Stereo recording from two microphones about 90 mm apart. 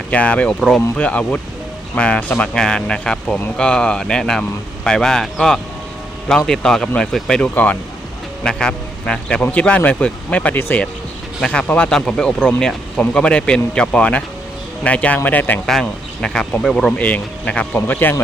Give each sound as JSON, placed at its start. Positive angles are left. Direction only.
{"t": 0.1, "sound": "speech", "side_deg": 15}
{"t": 15.6, "sound": "speech", "side_deg": 5}